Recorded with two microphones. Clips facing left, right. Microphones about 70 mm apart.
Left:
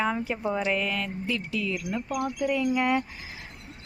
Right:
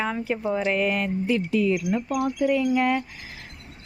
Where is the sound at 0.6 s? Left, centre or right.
Centre.